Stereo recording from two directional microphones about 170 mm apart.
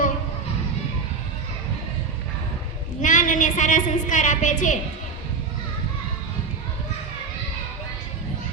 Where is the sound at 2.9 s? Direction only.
50° left (ahead or behind).